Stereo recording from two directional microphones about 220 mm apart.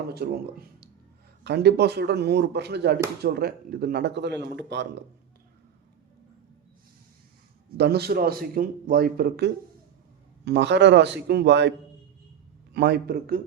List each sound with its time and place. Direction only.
0.1 s a man's voice: 45° right (ahead or behind)
7.8 s a man's voice: 45° right (ahead or behind)
12.7 s a man's voice: 50° right (ahead or behind)